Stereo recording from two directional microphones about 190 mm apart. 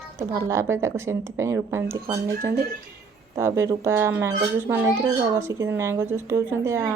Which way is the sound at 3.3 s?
15° right (ahead or behind).